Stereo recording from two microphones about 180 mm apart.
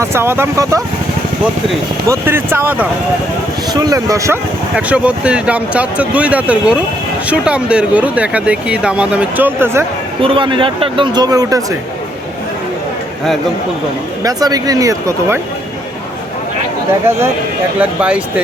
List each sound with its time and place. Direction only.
0.0 s speech: 15° right (ahead or behind)
2.0 s speech: 10° right (ahead or behind)
4.7 s speech: 5° right (ahead or behind)
10.2 s speech: 30° right (ahead or behind)
14.3 s speech: 20° right (ahead or behind)
17.7 s speech: 5° right (ahead or behind)